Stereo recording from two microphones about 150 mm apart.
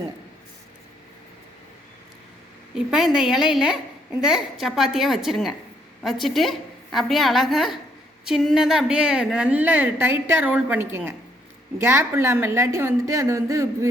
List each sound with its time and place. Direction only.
2.7 s a woman's voice: 5° right (ahead or behind)